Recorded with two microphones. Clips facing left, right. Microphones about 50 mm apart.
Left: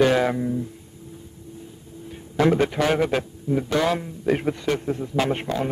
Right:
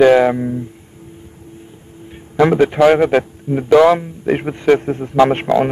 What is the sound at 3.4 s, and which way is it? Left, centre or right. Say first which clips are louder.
A man's voice: right 12 dB; right.